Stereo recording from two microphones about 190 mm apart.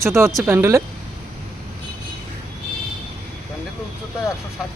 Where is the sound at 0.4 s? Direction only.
15° right (ahead or behind).